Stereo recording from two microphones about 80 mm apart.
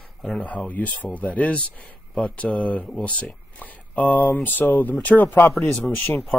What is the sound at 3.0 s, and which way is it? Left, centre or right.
Speech, centre.